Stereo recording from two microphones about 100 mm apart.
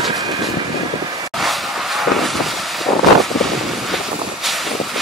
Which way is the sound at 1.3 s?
Centre (ahead or behind).